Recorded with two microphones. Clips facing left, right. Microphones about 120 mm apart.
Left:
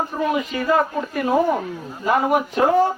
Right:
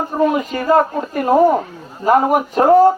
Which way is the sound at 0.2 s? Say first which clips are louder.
Right 7 dB; 40° right (ahead or behind).